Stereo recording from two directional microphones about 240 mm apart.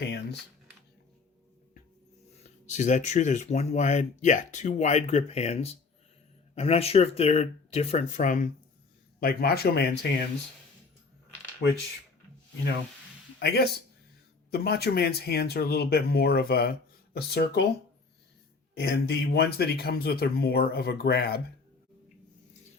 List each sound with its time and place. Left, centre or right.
0.0 s speech: left
2.4 s speech: left
13.4 s speech: left
18.8 s speech: left